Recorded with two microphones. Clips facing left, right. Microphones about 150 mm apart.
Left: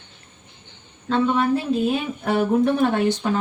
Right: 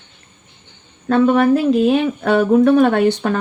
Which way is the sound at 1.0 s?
60° right (ahead or behind).